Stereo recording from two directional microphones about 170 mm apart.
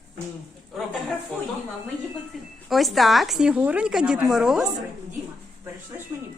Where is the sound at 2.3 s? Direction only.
Centre (ahead or behind).